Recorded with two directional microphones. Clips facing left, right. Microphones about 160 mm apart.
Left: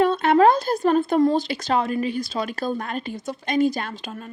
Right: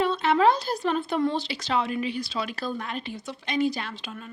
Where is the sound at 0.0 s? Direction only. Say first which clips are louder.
Left 5 dB; 50° left (ahead or behind).